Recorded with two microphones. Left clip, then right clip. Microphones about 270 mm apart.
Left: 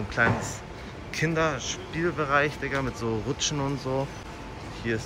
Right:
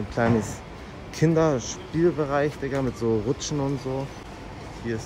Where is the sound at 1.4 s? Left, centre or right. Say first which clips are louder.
Right 3 dB; centre.